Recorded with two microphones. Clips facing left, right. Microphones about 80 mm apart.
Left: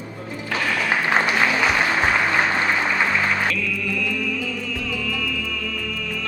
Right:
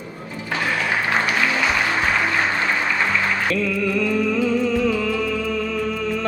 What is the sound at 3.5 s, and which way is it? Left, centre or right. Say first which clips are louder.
Music: right 5 dB; right.